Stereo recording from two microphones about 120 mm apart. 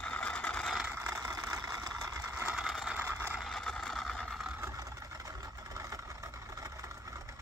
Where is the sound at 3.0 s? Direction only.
20° right (ahead or behind).